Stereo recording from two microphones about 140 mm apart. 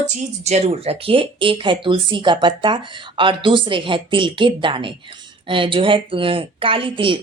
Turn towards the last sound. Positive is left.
turn(degrees=-35)  # may be behind; listen again after turning